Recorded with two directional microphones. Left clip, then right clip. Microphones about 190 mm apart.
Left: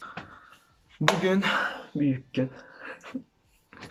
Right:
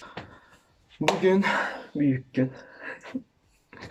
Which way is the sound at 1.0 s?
Centre (ahead or behind).